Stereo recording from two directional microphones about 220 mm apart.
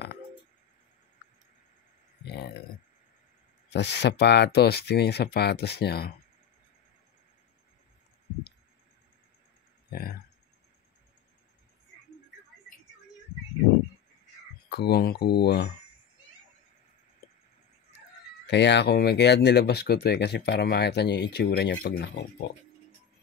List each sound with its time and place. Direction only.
1.2 s a sound: 50° left (ahead or behind)
2.2 s speech: 50° left (ahead or behind)
3.7 s speech: 50° left (ahead or behind)
9.8 s speech: 45° left (ahead or behind)
14.7 s speech: 45° left (ahead or behind)
18.5 s speech: 50° left (ahead or behind)